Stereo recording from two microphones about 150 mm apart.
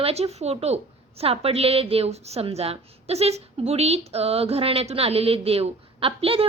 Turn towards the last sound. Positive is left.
turn(degrees=-40)  # may be behind; listen again after turning